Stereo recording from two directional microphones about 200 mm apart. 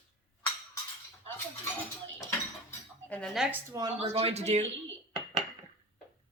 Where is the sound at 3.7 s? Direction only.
20° right (ahead or behind).